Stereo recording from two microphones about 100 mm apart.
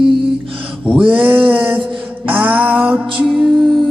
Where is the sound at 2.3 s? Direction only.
15° right (ahead or behind).